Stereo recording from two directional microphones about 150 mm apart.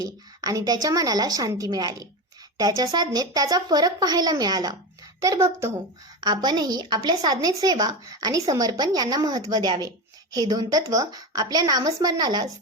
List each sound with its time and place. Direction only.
0.0 s a woman's voice: 25° right (ahead or behind)